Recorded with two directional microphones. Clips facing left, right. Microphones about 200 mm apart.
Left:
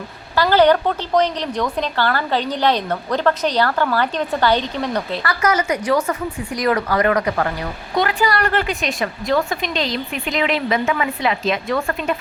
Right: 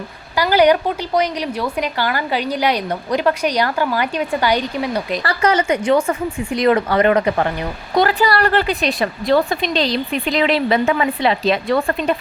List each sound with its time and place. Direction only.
0.3 s a woman's voice: 10° right (ahead or behind)
5.2 s speech: 30° right (ahead or behind)
7.9 s a woman's voice: 35° right (ahead or behind)